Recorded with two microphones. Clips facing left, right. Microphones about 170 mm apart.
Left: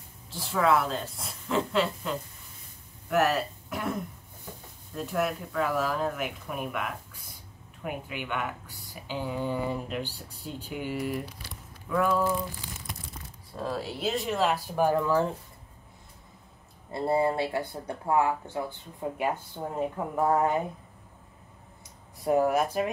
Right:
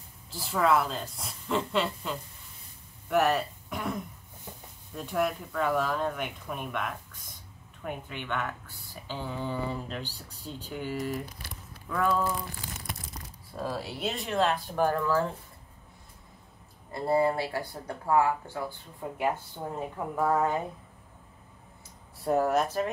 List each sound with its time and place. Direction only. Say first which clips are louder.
0.3 s speech: left 1 dB; centre (ahead or behind)
3.1 s a sound: even; centre (ahead or behind)
4.9 s speech: even; centre (ahead or behind)
13.6 s speech: left 1 dB; 5° right (ahead or behind); by 15.2 s 20° left (ahead or behind)
16.9 s speech: even; 20° left (ahead or behind)
22.2 s speech: left 1 dB; 15° left (ahead or behind)